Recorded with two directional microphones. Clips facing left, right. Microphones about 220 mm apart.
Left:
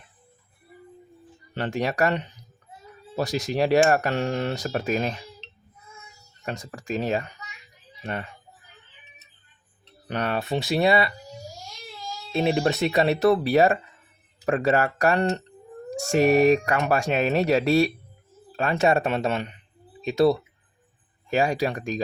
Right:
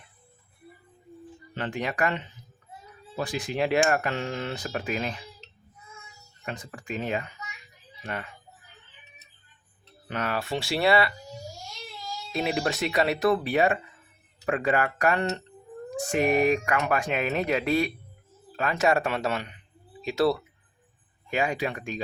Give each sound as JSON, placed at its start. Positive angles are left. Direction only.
{"t": 1.5, "sound": "speech", "side_deg": 40}
{"t": 6.4, "sound": "speech", "side_deg": 40}
{"t": 10.1, "sound": "speech", "side_deg": 35}
{"t": 12.3, "sound": "speech", "side_deg": 25}
{"t": 21.2, "sound": "speech", "side_deg": 35}